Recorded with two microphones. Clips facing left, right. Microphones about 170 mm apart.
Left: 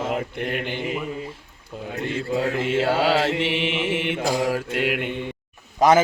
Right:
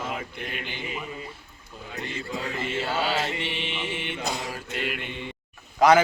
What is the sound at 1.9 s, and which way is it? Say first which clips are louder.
Speech: left 8 dB; 60° left (ahead or behind).